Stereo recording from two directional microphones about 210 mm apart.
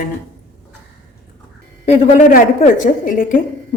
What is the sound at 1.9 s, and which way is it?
A woman's voice, 35° left (ahead or behind).